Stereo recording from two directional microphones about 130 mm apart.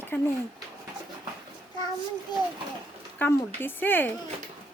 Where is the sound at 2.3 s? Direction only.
35° left (ahead or behind).